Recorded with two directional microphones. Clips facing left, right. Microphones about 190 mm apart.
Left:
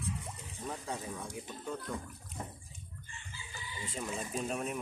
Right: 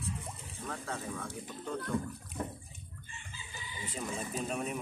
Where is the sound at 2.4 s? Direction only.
60° right (ahead or behind).